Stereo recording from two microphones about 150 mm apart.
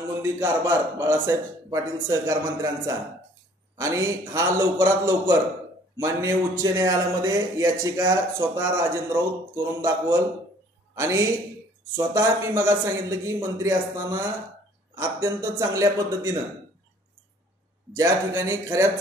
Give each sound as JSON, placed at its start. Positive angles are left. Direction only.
{"t": 0.2, "sound": "a man's voice", "side_deg": -15}
{"t": 3.7, "sound": "a man's voice", "side_deg": -20}
{"t": 17.9, "sound": "a man's voice", "side_deg": -20}